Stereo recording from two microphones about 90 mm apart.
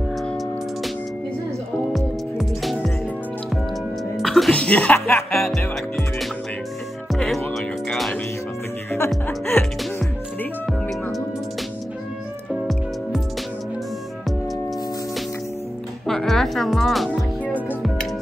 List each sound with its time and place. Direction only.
1.9 s music: centre (ahead or behind)
4.2 s music: centre (ahead or behind)
4.5 s music: 10° left (ahead or behind)
4.9 s music: 30° left (ahead or behind)
7.1 s music: centre (ahead or behind)
9.5 s speech: 20° left (ahead or behind)
10.7 s music: centre (ahead or behind)
16.1 s music: 5° left (ahead or behind)